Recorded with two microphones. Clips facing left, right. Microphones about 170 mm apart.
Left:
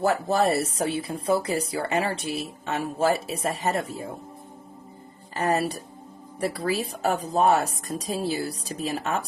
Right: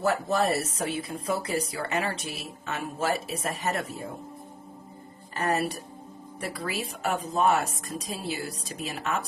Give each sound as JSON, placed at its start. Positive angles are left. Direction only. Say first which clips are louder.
{"t": 0.0, "sound": "speech", "louder": "left 3 dB", "side_deg": 35}
{"t": 5.3, "sound": "speech", "louder": "left 3 dB", "side_deg": 35}